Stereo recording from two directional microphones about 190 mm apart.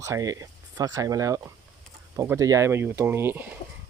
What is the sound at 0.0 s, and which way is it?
Speech, 15° right (ahead or behind).